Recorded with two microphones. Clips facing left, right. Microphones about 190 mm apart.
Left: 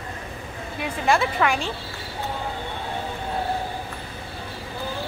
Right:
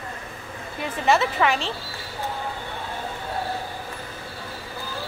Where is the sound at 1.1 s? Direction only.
Centre (ahead or behind).